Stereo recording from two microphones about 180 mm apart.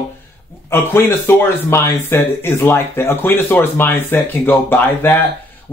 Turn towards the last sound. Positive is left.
turn(degrees=10)  # may be behind; listen again after turning